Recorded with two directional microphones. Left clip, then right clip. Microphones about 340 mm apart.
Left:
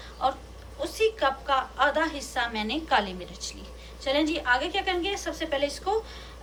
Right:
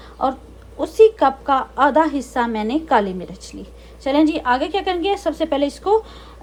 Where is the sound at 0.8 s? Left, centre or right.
Centre.